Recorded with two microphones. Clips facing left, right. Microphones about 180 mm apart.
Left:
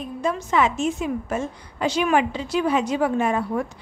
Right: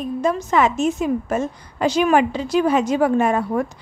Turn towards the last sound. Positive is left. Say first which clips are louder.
# right 4 dB
turn(degrees=-50)  # may be behind; listen again after turning